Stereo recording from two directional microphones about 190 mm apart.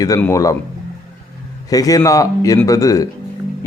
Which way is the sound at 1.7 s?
20° left (ahead or behind).